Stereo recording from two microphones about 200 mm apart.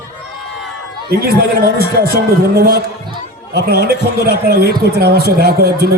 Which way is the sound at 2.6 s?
55° right (ahead or behind).